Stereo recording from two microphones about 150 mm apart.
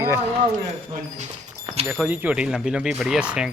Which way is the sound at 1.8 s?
10° right (ahead or behind).